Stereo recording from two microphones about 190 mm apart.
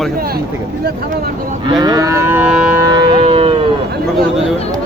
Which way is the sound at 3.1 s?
25° right (ahead or behind).